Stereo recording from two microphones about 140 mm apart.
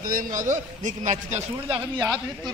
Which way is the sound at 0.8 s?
60° right (ahead or behind).